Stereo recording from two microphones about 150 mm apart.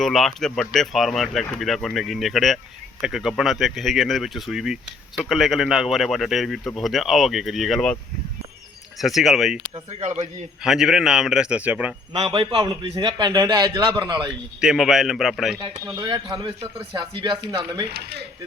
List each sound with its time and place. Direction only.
0.0 s speech: centre (ahead or behind)
9.0 s speech: centre (ahead or behind)
10.0 s a man's voice: 50° right (ahead or behind)
10.6 s speech: 5° right (ahead or behind)
12.2 s a man's voice: 40° right (ahead or behind)
14.6 s speech: 5° right (ahead or behind)
15.6 s a man's voice: 30° right (ahead or behind)
17.9 s coin: 90° right